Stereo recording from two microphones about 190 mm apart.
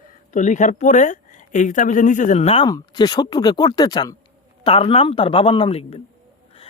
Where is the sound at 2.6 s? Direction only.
20° left (ahead or behind).